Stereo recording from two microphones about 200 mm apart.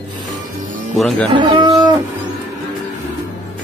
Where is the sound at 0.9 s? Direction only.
Centre (ahead or behind).